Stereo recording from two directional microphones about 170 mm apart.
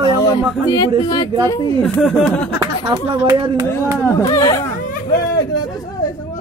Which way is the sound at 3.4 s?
30° right (ahead or behind).